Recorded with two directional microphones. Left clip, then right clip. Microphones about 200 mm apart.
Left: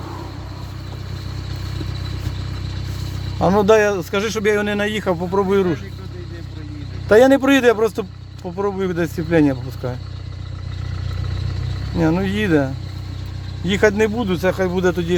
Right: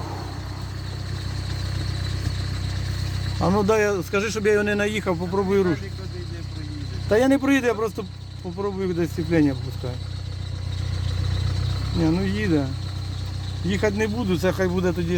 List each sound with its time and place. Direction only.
3.4 s speech: 20° left (ahead or behind)
7.1 s speech: 20° left (ahead or behind)
11.9 s speech: 30° left (ahead or behind)
13.7 s speech: 30° left (ahead or behind)
14.2 s speech: 5° left (ahead or behind)